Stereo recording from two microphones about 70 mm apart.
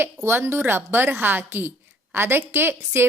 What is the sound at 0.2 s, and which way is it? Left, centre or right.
Speech, right.